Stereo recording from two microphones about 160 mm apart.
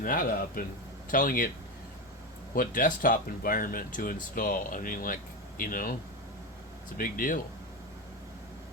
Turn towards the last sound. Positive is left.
turn(degrees=60)  # may be behind; listen again after turning